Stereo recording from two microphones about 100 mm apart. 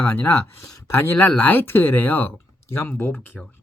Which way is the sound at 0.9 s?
25° left (ahead or behind).